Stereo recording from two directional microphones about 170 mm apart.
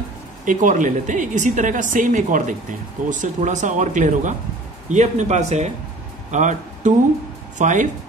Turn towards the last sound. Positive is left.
turn(degrees=-45)  # may be behind; listen again after turning